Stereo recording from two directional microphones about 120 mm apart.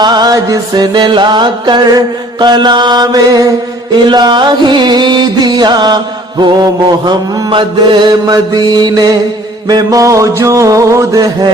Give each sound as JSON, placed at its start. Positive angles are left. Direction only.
{"t": 0.0, "sound": "music", "side_deg": -35}